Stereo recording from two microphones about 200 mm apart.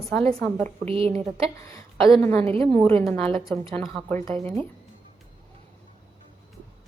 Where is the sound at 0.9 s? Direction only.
30° right (ahead or behind).